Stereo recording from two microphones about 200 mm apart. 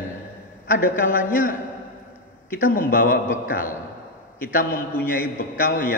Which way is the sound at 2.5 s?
45° left (ahead or behind).